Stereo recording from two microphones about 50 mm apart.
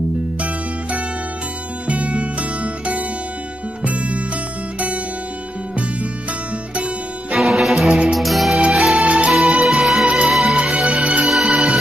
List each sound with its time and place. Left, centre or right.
1.9 s music: right
6.7 s music: right
7.3 s music: centre
9.0 s music: right
9.6 s music: centre
10.0 s music: right
11.2 s music: centre